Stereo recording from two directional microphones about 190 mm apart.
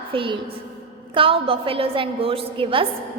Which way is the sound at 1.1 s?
30° right (ahead or behind).